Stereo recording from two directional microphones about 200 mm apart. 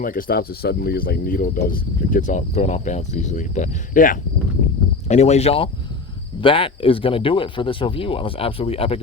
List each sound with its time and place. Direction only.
0.0 s speech: 45° left (ahead or behind)